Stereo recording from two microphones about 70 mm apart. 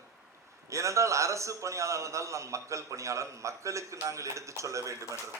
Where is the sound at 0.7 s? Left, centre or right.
Right.